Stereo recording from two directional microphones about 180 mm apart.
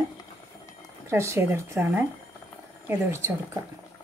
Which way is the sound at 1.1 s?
15° right (ahead or behind).